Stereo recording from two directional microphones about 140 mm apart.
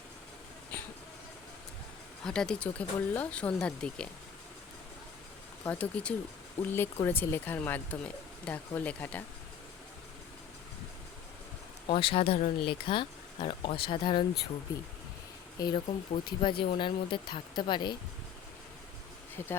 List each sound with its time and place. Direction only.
2.2 s speech: 5° left (ahead or behind)
5.6 s speech: 10° left (ahead or behind)
11.9 s speech: 40° left (ahead or behind)
15.6 s speech: 35° left (ahead or behind)
19.4 s speech: 15° left (ahead or behind)